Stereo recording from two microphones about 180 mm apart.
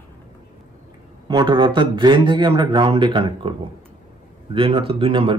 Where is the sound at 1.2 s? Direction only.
25° right (ahead or behind).